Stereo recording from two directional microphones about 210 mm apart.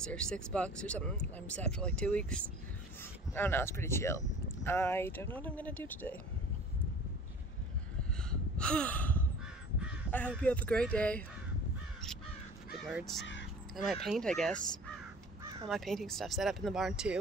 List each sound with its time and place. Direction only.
0.0 s speech: 5° left (ahead or behind)
8.3 s gasp: 5° left (ahead or behind)
10.1 s speech: 5° left (ahead or behind)
12.8 s speech: centre (ahead or behind)
13.2 s speech: 60° left (ahead or behind)
14.0 s speech: centre (ahead or behind)
15.7 s speech: centre (ahead or behind)